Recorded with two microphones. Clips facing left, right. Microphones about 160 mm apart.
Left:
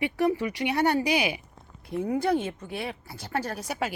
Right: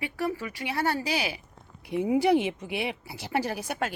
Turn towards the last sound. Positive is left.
turn(degrees=0)  # may be behind; listen again after turning